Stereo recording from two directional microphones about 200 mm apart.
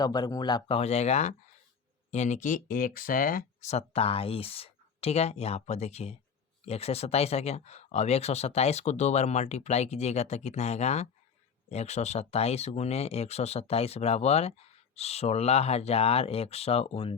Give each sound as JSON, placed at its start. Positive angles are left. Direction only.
{"t": 0.0, "sound": "speech", "side_deg": 20}